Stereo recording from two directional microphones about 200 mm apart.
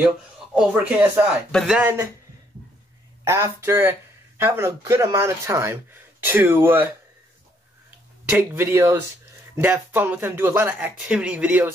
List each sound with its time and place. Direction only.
0.6 s speech: 5° right (ahead or behind)
3.3 s speech: 15° right (ahead or behind)
8.3 s speech: 10° right (ahead or behind)